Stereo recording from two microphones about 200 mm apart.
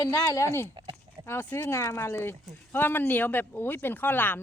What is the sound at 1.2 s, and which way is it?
Speech, 10° left (ahead or behind).